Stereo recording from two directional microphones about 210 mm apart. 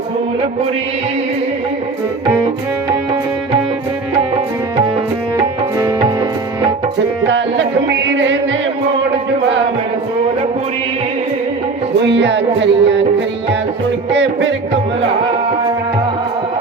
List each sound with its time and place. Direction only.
7.3 s music: 60° right (ahead or behind)
12.0 s music: 55° right (ahead or behind)